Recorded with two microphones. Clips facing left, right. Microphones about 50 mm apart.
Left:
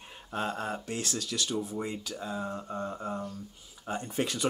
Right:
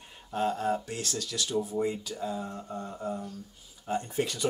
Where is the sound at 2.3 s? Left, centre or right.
Left.